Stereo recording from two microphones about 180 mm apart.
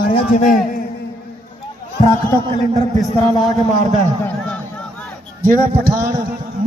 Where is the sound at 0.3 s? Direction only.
50° left (ahead or behind).